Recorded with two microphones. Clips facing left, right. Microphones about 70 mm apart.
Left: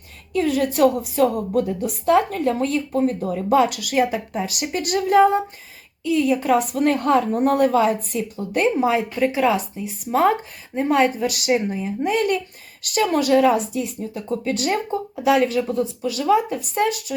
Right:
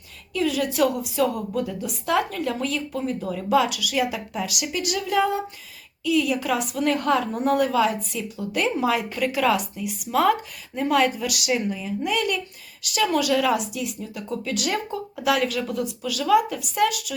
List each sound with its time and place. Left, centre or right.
0.3 s a woman's voice: left